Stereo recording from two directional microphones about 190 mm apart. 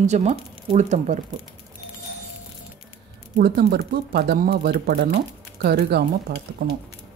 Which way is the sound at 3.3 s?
55° right (ahead or behind).